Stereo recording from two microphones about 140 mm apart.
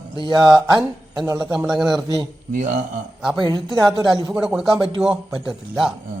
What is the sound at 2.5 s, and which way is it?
Speech, 65° right (ahead or behind).